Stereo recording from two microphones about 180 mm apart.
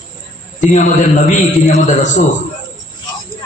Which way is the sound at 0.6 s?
40° left (ahead or behind).